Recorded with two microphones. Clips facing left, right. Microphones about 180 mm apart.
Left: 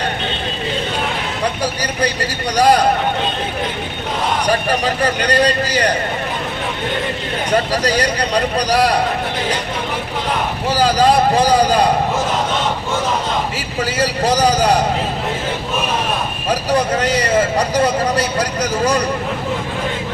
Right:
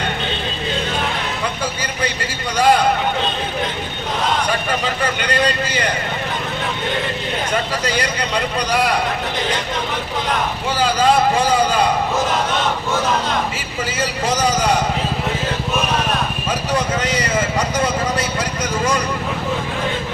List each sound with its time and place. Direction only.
2.6 s a man's voice: 40° left (ahead or behind)
4.4 s a man's voice: 40° left (ahead or behind)
7.5 s a man's voice: 40° left (ahead or behind)
10.8 s a man's voice: 35° left (ahead or behind)
14.0 s a man's voice: 35° left (ahead or behind)
16.5 s a man's voice: 35° left (ahead or behind)